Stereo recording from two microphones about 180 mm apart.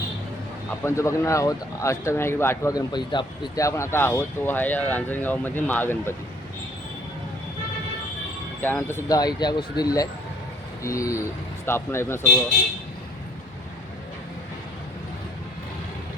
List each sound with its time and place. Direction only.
0.9 s speech: 15° left (ahead or behind)
8.6 s speech: 10° left (ahead or behind)